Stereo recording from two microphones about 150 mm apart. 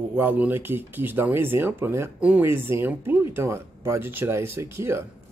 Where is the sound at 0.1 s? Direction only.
10° right (ahead or behind).